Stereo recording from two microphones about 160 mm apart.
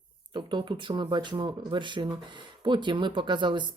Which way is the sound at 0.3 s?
30° right (ahead or behind).